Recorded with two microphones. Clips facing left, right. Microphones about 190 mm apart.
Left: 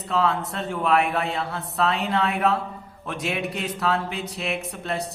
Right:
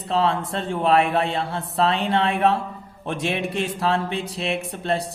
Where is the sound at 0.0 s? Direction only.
30° right (ahead or behind).